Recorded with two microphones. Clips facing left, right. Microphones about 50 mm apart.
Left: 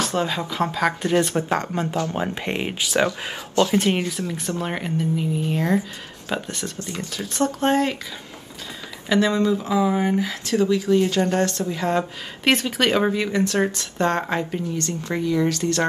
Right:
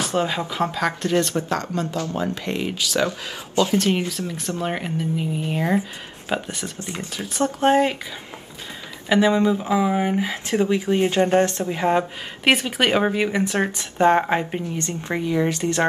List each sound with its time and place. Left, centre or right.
0.0 s speech: centre
1.0 s speech: centre
4.3 s speech: centre
6.8 s speech: right
7.3 s speech: centre
9.1 s speech: centre
12.4 s speech: centre